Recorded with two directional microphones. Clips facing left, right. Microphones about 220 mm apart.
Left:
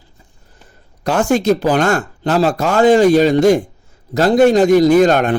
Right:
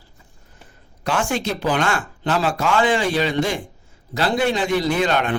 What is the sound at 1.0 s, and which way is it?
A man's voice, 40° left (ahead or behind).